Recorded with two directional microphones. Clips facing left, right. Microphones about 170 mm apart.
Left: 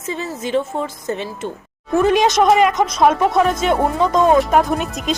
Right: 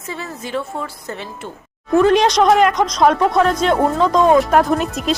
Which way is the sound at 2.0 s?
5° left (ahead or behind).